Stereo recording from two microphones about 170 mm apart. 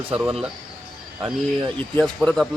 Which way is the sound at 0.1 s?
5° right (ahead or behind).